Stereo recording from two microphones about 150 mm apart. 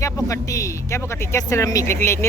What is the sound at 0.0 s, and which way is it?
Speech, 20° left (ahead or behind).